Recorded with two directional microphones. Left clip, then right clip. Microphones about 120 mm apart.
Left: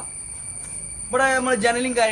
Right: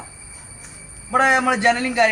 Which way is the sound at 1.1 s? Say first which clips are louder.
Right 3 dB; 55° left (ahead or behind).